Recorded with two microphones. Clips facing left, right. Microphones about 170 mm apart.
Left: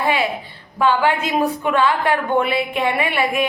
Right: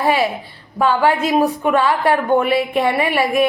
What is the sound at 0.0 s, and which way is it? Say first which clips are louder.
A woman's voice: right 3 dB; 35° right (ahead or behind).